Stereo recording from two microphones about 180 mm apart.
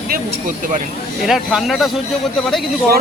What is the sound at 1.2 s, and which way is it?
Speech, centre (ahead or behind).